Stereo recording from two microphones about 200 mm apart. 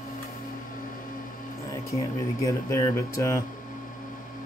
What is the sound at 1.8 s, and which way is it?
Speech, 15° left (ahead or behind).